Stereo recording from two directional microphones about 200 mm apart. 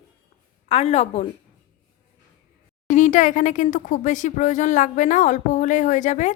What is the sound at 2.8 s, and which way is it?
A woman's voice, 40° left (ahead or behind).